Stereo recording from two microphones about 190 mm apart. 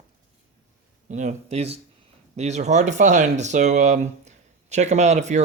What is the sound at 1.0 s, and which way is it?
Speech, 40° right (ahead or behind).